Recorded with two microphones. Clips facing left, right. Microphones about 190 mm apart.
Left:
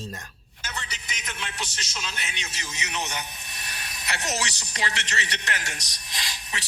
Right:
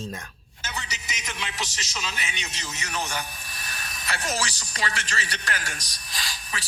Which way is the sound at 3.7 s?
25° left (ahead or behind).